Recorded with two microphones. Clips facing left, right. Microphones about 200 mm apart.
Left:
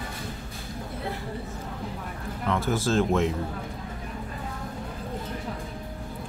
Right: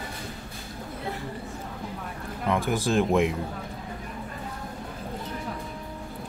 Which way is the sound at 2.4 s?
15° right (ahead or behind).